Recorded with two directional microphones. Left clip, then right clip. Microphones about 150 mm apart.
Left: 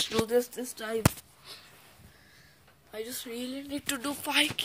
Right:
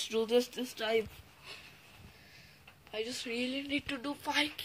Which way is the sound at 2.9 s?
5° left (ahead or behind).